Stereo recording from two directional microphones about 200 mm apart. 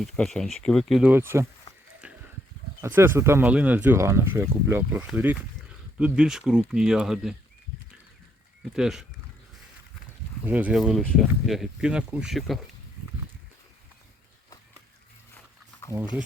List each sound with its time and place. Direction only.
0.0 s speech: 5° left (ahead or behind)
2.8 s speech: 10° right (ahead or behind)
8.7 s speech: 5° right (ahead or behind)
10.4 s speech: 10° right (ahead or behind)